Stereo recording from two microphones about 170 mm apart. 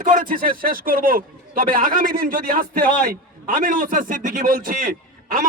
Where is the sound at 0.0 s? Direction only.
55° right (ahead or behind).